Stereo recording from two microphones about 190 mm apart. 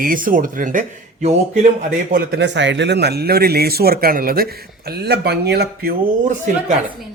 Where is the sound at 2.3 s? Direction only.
65° right (ahead or behind).